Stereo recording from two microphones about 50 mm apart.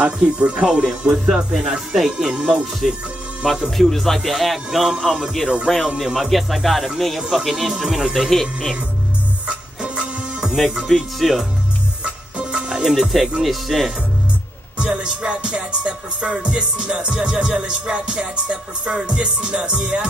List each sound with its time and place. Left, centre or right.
0.0 s music: right
1.2 s speech: centre
1.6 s speech: centre
3.7 s speech: centre
9.5 s music: right
10.5 s speech: centre
12.0 s music: centre
13.4 s speech: centre
14.8 s music: centre